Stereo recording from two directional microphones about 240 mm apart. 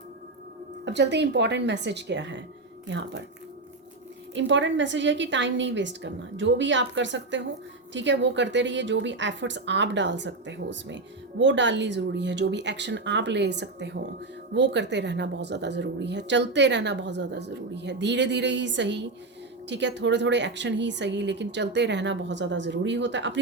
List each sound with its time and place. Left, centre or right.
0.9 s a woman's voice: right
4.4 s a woman's voice: right